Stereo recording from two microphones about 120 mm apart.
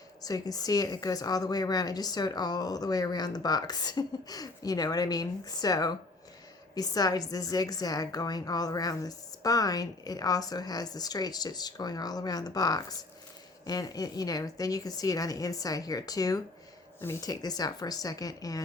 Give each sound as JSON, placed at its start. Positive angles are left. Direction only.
{"t": 0.2, "sound": "a woman's voice", "side_deg": 30}
{"t": 17.0, "sound": "a woman's voice", "side_deg": 20}
{"t": 17.2, "sound": "a woman's voice", "side_deg": 35}